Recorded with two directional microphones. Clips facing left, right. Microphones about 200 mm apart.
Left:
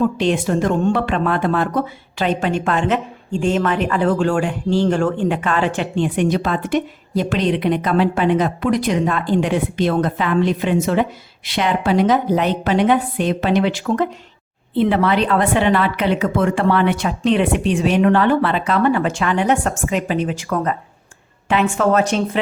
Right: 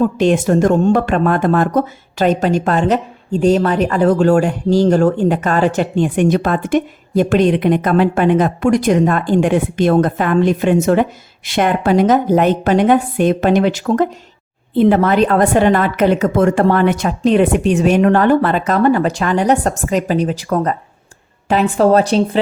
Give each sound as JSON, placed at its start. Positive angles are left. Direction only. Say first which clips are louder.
{"t": 0.0, "sound": "a woman's voice", "louder": "right 4 dB", "side_deg": -45}